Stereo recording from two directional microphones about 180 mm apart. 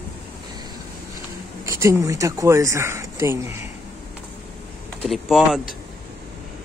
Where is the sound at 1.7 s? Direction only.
15° right (ahead or behind).